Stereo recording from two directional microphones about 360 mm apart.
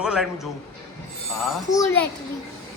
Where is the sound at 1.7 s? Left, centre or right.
Centre.